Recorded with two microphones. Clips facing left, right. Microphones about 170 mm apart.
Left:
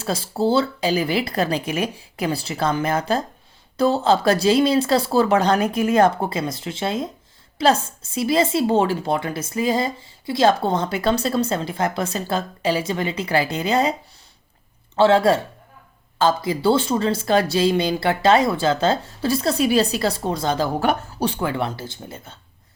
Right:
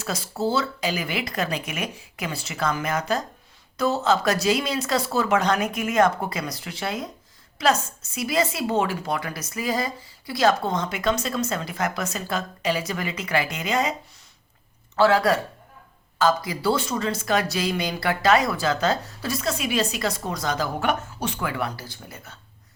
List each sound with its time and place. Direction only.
0.0 s a woman's voice: 30° left (ahead or behind)
14.9 s a woman's voice: 25° left (ahead or behind)